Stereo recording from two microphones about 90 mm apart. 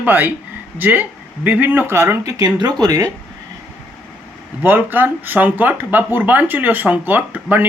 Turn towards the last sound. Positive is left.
turn(degrees=-20)  # may be behind; listen again after turning